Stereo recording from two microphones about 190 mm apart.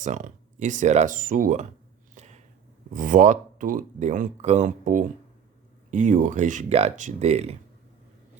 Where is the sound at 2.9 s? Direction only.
45° right (ahead or behind).